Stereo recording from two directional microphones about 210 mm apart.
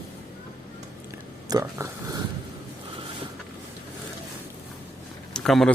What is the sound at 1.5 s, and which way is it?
Speech, 15° right (ahead or behind).